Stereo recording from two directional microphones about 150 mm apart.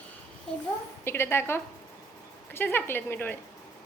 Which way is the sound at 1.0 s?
15° left (ahead or behind).